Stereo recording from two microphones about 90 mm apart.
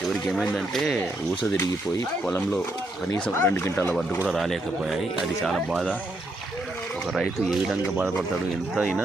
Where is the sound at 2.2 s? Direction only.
10° left (ahead or behind).